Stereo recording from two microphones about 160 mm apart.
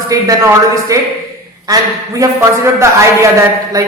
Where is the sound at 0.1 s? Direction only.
20° right (ahead or behind).